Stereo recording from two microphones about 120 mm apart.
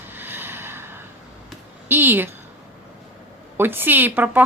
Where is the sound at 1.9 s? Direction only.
15° right (ahead or behind).